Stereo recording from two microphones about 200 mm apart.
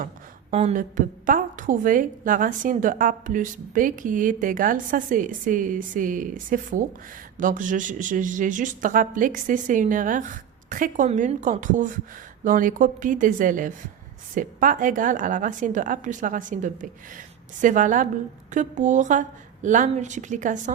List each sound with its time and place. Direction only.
0.5 s a woman's voice: 35° right (ahead or behind)